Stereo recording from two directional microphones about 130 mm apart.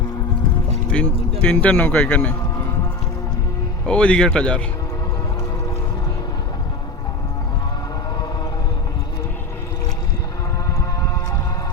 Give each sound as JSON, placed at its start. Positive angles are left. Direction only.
{"t": 0.9, "sound": "speech", "side_deg": 10}
{"t": 3.8, "sound": "speech", "side_deg": 10}
{"t": 10.8, "sound": "music", "side_deg": 20}